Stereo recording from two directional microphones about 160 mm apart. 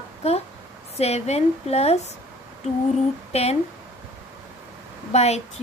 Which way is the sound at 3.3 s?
40° left (ahead or behind).